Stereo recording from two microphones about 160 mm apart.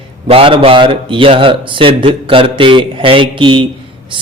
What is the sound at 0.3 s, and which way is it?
A man's voice, 35° right (ahead or behind).